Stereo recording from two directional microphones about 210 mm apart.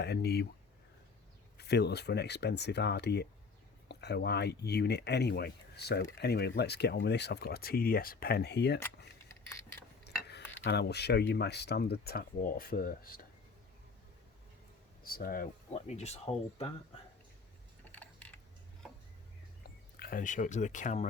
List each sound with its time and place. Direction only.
0.0 s speech: 50° left (ahead or behind)
1.5 s speech: 50° left (ahead or behind)
10.1 s stir: 50° left (ahead or behind)
10.6 s speech: 50° left (ahead or behind)
15.0 s speech: 40° left (ahead or behind)
17.9 s mechanisms: 5° left (ahead or behind)
19.6 s speech: 45° left (ahead or behind)